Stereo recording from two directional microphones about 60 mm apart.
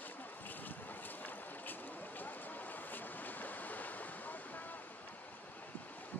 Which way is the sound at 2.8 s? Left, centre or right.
Left.